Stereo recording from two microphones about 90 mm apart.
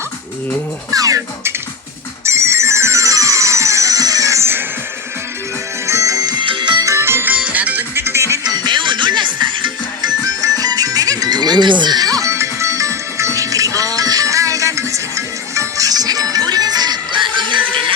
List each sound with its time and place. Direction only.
0.9 s speech: 40° right (ahead or behind)
2.2 s ringtone: 30° right (ahead or behind)
5.8 s music: 35° right (ahead or behind)
6.4 s music: 65° right (ahead or behind)
6.8 s music: 30° right (ahead or behind)
8.4 s music: 55° right (ahead or behind)
10.2 s music: 45° right (ahead or behind); by 17.6 s 65° right (ahead or behind)
17.6 s a sound: 15° left (ahead or behind)